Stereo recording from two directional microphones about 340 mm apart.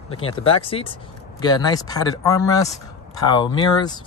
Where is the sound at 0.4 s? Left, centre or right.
Centre.